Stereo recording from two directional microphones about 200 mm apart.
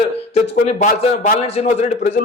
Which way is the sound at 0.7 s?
35° left (ahead or behind).